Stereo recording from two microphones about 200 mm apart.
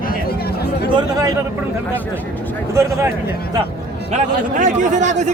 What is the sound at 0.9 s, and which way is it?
Speech, 15° right (ahead or behind).